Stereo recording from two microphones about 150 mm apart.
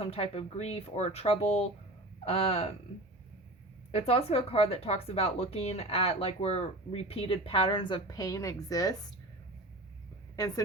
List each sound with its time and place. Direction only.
0.0 s speech: 40° left (ahead or behind)
3.9 s a woman's voice: 40° left (ahead or behind); by 9.1 s 25° left (ahead or behind)
10.3 s speech: 25° left (ahead or behind)